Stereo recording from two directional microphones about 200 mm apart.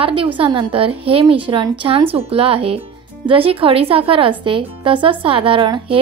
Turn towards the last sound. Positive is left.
turn(degrees=-25)  # may be behind; listen again after turning